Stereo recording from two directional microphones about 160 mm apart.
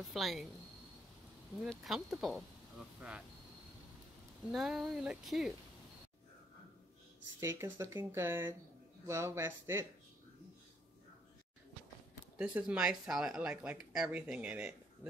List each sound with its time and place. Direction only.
0.1 s speech: centre (ahead or behind)
1.6 s speech: centre (ahead or behind)
4.5 s speech: 5° right (ahead or behind)
7.3 s speech: 15° right (ahead or behind)
12.4 s speech: 5° right (ahead or behind)